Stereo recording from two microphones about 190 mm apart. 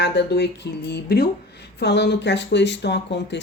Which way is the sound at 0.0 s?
65° left (ahead or behind).